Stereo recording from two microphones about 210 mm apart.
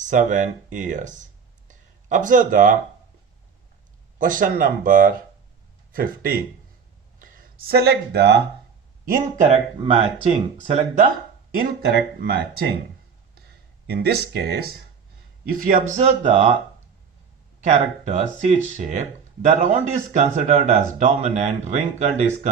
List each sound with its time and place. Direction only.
0.0 s speech: 35° right (ahead or behind)
1.6 s a sound: 35° right (ahead or behind)
4.2 s speech: 40° right (ahead or behind)
9.0 s speech: 35° right (ahead or behind)
11.9 s speech: 50° right (ahead or behind)
13.8 s speech: 50° right (ahead or behind); by 16.6 s 25° right (ahead or behind)
17.6 s speech: 30° right (ahead or behind)